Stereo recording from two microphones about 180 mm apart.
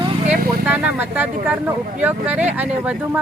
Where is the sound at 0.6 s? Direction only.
10° right (ahead or behind).